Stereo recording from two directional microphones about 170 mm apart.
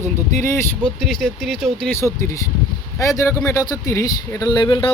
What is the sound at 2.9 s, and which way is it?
Speech, 20° left (ahead or behind).